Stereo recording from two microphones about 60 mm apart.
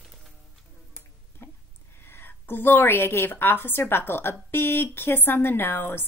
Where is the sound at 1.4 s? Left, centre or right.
Left.